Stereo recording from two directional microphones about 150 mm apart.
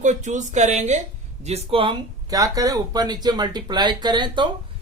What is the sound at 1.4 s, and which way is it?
Speech, 40° right (ahead or behind).